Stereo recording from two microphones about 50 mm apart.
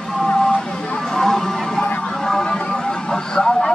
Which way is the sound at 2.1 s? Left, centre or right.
Centre.